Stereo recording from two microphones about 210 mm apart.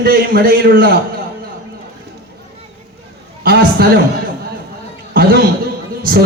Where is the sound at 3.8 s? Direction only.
45° right (ahead or behind).